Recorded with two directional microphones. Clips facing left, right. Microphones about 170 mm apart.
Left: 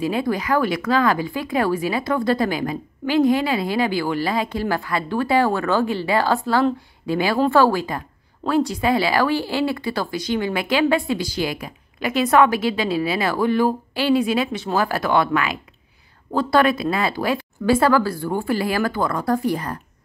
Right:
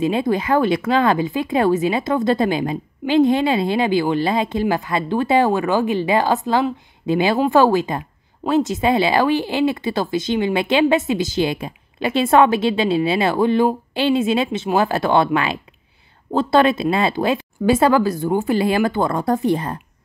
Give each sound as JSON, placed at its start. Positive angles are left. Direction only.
{"t": 0.0, "sound": "speech", "side_deg": -25}